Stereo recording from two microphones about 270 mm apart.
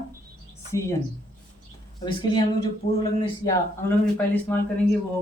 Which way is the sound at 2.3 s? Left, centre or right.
Centre.